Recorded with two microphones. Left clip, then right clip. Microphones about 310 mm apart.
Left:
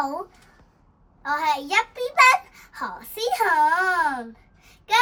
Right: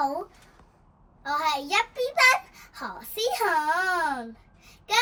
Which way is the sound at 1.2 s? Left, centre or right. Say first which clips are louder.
Left 3 dB; centre.